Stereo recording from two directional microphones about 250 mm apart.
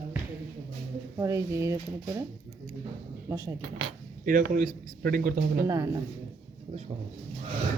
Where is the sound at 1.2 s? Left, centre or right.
Centre.